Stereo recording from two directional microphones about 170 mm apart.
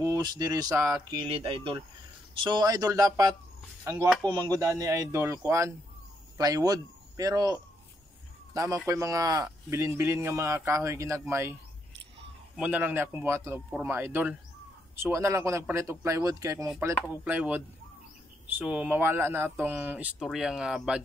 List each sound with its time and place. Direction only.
0.0 s speech: 20° right (ahead or behind)
1.1 s speech: 30° right (ahead or behind)
4.3 s speech: 30° right (ahead or behind)
4.6 s speech: 20° right (ahead or behind)
8.8 s speech: 20° right (ahead or behind)
12.5 s speech: 10° right (ahead or behind)